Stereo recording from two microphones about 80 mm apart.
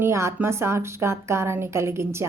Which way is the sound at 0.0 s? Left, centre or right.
Right.